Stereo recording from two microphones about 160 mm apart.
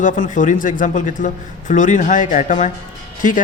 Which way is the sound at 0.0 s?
50° left (ahead or behind).